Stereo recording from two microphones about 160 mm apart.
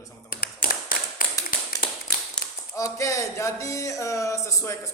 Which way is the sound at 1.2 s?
60° left (ahead or behind).